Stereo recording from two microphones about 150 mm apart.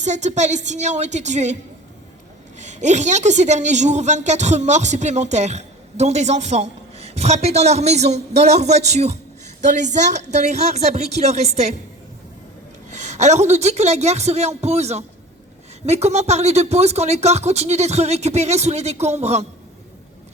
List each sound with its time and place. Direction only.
0.0 s a woman's voice: 50° right (ahead or behind)
2.6 s a woman's voice: 50° right (ahead or behind)
12.9 s a woman's voice: 50° right (ahead or behind)